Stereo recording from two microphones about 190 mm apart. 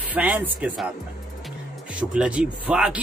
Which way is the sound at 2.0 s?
5° right (ahead or behind).